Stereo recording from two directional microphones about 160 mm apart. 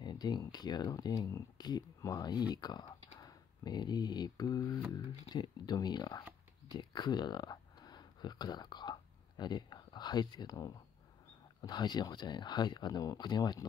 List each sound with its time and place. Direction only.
0.0 s speech: 25° left (ahead or behind)